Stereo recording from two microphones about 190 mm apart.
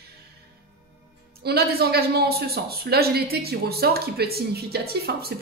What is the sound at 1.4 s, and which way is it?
Speech, 55° right (ahead or behind).